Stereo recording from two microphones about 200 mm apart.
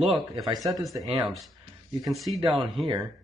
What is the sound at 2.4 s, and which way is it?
Speech, 25° right (ahead or behind).